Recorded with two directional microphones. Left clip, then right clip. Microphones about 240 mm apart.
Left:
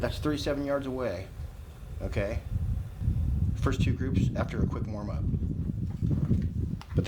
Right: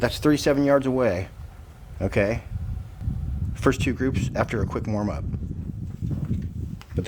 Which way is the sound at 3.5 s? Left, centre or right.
Right.